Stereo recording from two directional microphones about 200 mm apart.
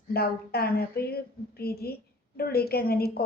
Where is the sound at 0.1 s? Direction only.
50° left (ahead or behind).